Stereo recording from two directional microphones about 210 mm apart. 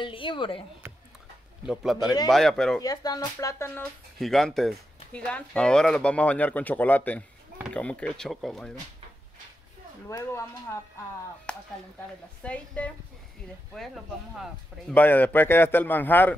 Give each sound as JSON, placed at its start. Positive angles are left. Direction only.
{"t": 0.0, "sound": "speech", "side_deg": 25}
{"t": 1.7, "sound": "speech", "side_deg": 0}
{"t": 2.8, "sound": "a man's voice", "side_deg": 20}
{"t": 4.2, "sound": "speech", "side_deg": 0}
{"t": 10.0, "sound": "a man's voice", "side_deg": 15}
{"t": 11.5, "sound": "speech", "side_deg": 5}
{"t": 14.4, "sound": "a man's voice", "side_deg": 5}